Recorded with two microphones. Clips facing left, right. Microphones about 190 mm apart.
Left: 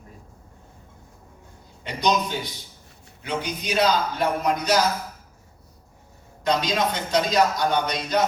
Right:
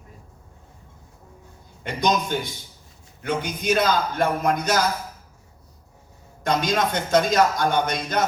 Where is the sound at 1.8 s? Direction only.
50° right (ahead or behind).